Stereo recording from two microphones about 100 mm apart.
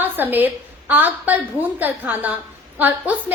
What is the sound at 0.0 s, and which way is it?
A woman's voice, 20° right (ahead or behind).